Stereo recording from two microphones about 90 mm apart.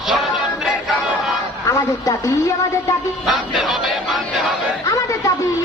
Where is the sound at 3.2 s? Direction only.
Centre (ahead or behind).